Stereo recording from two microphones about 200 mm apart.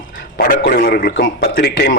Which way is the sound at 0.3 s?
50° left (ahead or behind).